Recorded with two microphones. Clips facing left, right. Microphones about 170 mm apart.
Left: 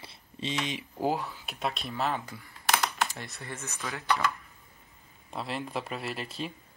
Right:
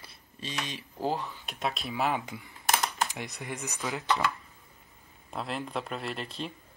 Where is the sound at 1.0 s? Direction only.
10° left (ahead or behind).